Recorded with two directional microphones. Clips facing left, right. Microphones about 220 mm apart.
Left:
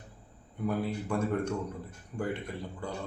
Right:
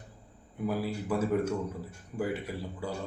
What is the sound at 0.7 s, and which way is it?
A man's voice, 5° right (ahead or behind).